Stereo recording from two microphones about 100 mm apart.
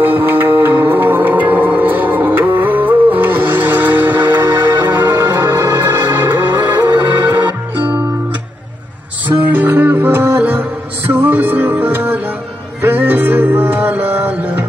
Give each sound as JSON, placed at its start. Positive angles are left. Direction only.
{"t": 0.0, "sound": "music", "side_deg": -20}
{"t": 9.5, "sound": "music", "side_deg": -20}